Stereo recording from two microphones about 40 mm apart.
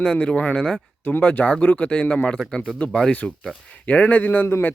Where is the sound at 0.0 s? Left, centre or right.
Left.